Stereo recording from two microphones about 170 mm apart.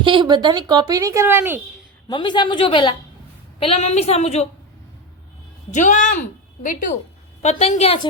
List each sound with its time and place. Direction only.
0.0 s a woman's voice: 30° right (ahead or behind); by 1.6 s 10° right (ahead or behind)
2.0 s a woman's voice: 25° left (ahead or behind)
5.7 s speech: 45° left (ahead or behind)
7.4 s a woman's voice: 40° left (ahead or behind)